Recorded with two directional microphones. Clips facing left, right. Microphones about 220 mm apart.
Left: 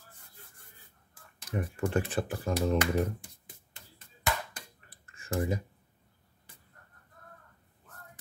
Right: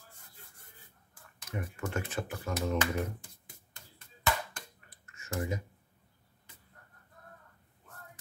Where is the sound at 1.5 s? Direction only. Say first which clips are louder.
Left 6 dB; 30° left (ahead or behind).